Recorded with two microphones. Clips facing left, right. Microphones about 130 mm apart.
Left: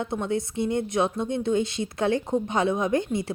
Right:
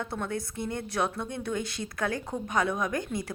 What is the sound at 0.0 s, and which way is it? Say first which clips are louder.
Speech: left 6 dB; 20° left (ahead or behind).